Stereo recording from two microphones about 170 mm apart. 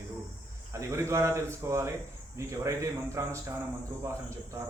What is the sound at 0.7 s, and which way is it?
Speech, 15° right (ahead or behind).